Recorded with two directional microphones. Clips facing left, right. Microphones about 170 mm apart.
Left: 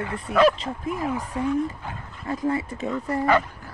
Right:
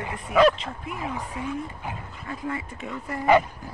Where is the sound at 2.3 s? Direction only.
35° left (ahead or behind).